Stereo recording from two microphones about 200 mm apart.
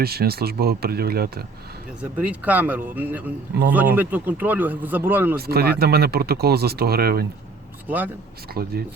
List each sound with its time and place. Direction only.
0.0 s speech: 50° right (ahead or behind)
2.0 s speech: 5° right (ahead or behind)
5.4 s speech: 50° right (ahead or behind)
7.9 s speech: 10° right (ahead or behind)
8.6 s speech: 45° right (ahead or behind)